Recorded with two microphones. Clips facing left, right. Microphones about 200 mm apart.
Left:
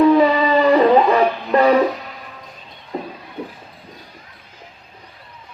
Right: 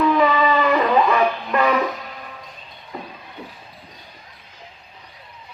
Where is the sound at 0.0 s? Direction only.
35° left (ahead or behind).